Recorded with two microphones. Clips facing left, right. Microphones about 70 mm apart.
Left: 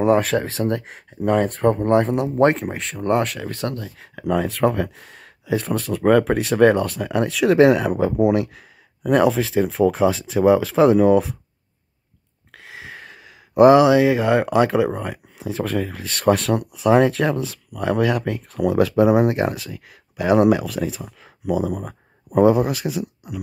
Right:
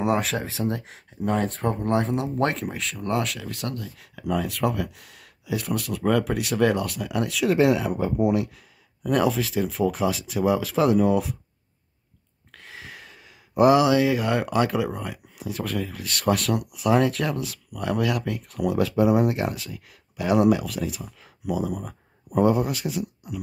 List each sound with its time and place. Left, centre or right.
0.0 s speech: left
0.3 s speech: left
1.2 s speech: left
7.8 s speech: left
12.6 s a sound: left
13.1 s a sound: left
13.6 s speech: left
20.2 s speech: left
22.4 s speech: left